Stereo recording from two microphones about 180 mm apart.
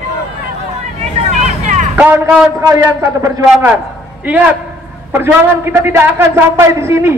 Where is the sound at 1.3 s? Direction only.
40° right (ahead or behind).